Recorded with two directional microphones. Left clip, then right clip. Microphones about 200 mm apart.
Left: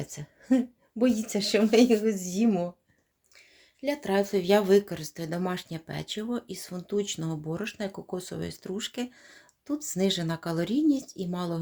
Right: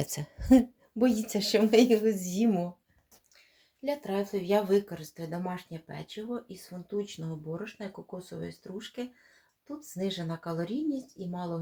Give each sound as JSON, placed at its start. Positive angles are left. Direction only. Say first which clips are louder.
{"t": 0.0, "sound": "speech", "louder": "right 4 dB", "side_deg": -25}
{"t": 0.9, "sound": "speech", "louder": "left 1 dB", "side_deg": 0}
{"t": 3.8, "sound": "speech", "louder": "left 5 dB", "side_deg": 40}